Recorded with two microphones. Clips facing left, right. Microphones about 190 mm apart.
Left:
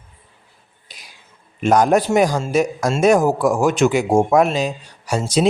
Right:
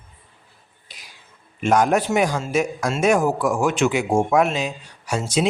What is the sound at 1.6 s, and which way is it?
A man's voice, 35° left (ahead or behind).